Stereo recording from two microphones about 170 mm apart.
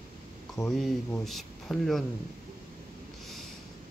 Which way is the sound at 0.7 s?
Centre (ahead or behind).